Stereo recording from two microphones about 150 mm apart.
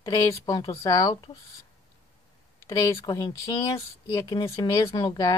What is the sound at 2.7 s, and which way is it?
A woman's voice, 25° left (ahead or behind).